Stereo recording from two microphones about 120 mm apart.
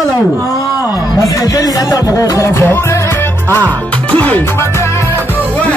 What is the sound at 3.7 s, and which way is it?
Music, 10° left (ahead or behind).